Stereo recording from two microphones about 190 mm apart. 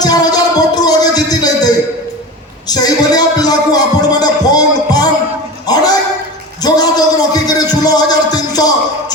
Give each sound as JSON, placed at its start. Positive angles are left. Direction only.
{"t": 0.0, "sound": "music", "side_deg": 20}
{"t": 5.6, "sound": "a sound", "side_deg": 20}
{"t": 6.6, "sound": "music", "side_deg": 20}